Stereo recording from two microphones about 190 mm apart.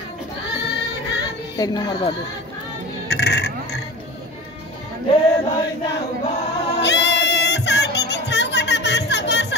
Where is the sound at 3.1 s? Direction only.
60° left (ahead or behind).